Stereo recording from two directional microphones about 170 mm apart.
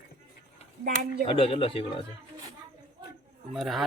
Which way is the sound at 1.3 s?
35° left (ahead or behind).